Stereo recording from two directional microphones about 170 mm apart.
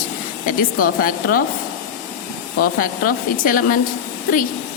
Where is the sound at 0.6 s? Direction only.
55° left (ahead or behind).